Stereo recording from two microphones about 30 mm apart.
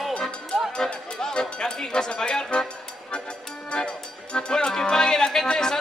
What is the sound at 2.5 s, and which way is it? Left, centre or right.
Music, left.